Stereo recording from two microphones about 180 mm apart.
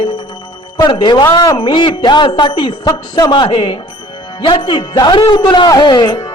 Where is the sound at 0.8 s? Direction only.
25° left (ahead or behind).